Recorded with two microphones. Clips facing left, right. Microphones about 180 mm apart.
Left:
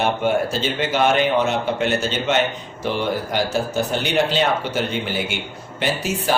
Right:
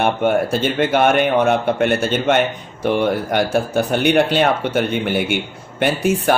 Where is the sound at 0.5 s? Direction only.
55° right (ahead or behind).